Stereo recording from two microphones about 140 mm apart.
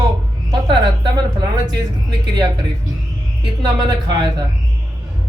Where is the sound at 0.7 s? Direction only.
30° right (ahead or behind).